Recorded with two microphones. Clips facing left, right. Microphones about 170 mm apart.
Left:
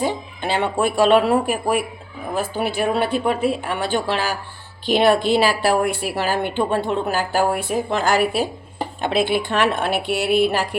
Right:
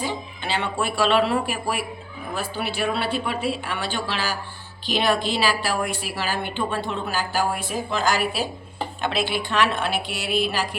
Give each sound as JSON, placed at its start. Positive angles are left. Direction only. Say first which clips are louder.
{"t": 0.0, "sound": "a woman's voice", "louder": "left 6 dB", "side_deg": 50}